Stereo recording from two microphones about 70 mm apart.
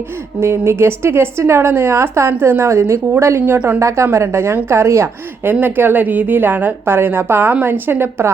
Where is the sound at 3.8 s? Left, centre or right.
Right.